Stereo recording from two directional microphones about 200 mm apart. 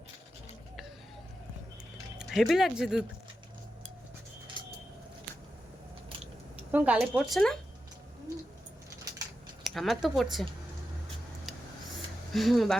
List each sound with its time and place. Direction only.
2.1 s speech: centre (ahead or behind)
6.7 s speech: 5° right (ahead or behind)
9.6 s speech: centre (ahead or behind)
12.3 s speech: centre (ahead or behind)